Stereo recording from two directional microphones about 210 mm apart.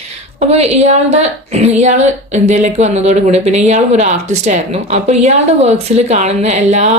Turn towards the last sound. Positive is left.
turn(degrees=-35)  # may be behind; listen again after turning